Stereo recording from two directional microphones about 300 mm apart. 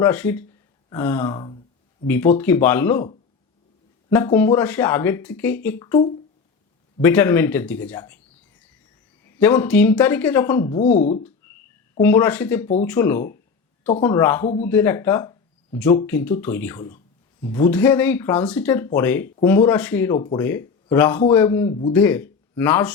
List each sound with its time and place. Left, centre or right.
0.0 s speech: centre
4.1 s speech: centre
9.2 s speech: centre
10.8 s speech: left
12.0 s speech: centre